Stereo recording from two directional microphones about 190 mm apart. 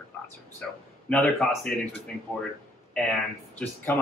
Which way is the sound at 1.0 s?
5° left (ahead or behind).